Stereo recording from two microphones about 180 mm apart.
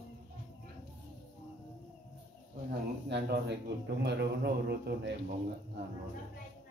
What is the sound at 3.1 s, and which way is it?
A man's voice, 70° right (ahead or behind).